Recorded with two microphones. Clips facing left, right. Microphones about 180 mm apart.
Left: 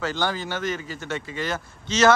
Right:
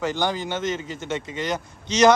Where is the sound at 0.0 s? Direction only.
15° right (ahead or behind).